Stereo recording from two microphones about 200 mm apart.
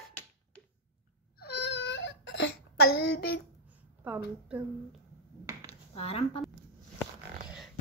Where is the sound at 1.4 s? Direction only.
60° left (ahead or behind).